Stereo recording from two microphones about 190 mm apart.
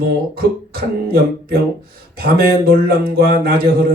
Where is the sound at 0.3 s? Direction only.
55° right (ahead or behind).